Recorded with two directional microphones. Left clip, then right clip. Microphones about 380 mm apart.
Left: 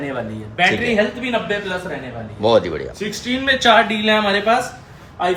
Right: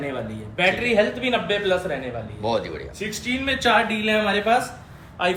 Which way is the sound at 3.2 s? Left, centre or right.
Centre.